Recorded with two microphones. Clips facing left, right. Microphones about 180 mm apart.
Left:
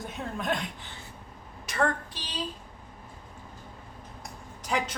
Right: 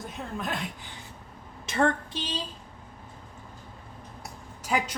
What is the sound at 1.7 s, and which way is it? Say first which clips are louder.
Speech: right 3 dB; 25° right (ahead or behind).